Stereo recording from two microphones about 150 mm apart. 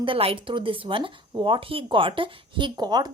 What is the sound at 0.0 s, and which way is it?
Speech, 35° right (ahead or behind).